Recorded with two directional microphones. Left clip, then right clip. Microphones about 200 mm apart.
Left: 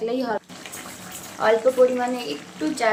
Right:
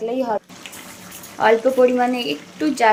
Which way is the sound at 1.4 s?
30° right (ahead or behind).